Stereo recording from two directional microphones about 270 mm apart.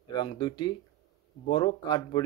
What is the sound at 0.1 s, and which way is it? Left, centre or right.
Speech, centre.